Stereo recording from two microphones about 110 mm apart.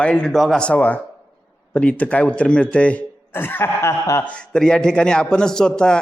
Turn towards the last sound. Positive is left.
turn(degrees=5)  # may be behind; listen again after turning